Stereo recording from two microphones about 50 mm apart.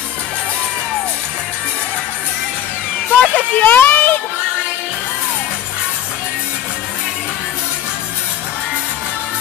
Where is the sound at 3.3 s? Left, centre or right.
Left.